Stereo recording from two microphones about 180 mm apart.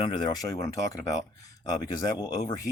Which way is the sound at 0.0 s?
25° left (ahead or behind).